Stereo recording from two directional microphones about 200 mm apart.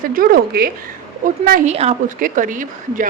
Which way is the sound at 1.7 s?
35° right (ahead or behind).